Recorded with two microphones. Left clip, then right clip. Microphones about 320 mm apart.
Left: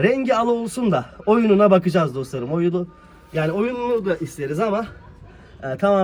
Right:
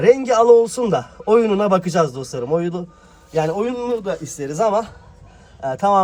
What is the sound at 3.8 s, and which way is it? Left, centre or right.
Speech, centre.